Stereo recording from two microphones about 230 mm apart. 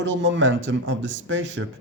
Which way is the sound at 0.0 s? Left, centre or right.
Right.